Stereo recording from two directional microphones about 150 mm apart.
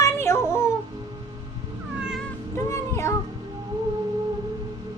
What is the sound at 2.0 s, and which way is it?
Cat, 5° right (ahead or behind).